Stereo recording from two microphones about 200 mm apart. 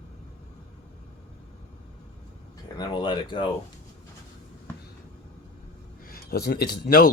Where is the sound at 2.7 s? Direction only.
20° left (ahead or behind).